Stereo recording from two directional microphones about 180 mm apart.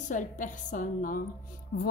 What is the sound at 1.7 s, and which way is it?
Speech, 65° left (ahead or behind).